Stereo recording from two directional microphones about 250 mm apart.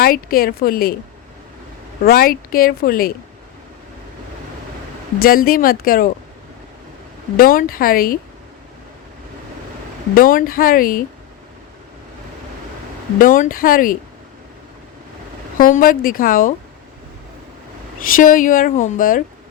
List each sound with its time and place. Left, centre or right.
0.0 s speech: left
2.0 s speech: left
5.2 s speech: left
7.3 s speech: left
10.2 s speech: left
13.1 s speech: left
15.5 s speech: left
18.2 s speech: left